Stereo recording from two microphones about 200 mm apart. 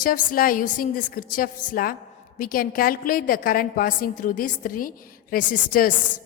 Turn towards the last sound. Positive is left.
turn(degrees=45)  # may be behind; listen again after turning